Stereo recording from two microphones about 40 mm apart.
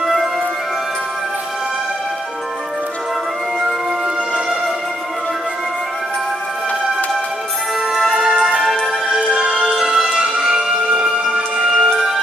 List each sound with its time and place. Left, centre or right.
0.0 s music: centre
8.1 s music: right
8.5 s music: centre
9.3 s music: centre
9.7 s music: centre
9.9 s music: centre